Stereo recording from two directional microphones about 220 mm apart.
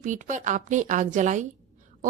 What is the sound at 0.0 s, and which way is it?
A woman's voice, 35° right (ahead or behind).